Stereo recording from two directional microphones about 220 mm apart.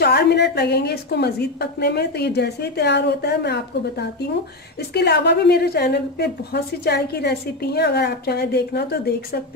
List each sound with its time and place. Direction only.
0.0 s a woman's voice: 50° left (ahead or behind)
4.7 s a woman's voice: 50° left (ahead or behind)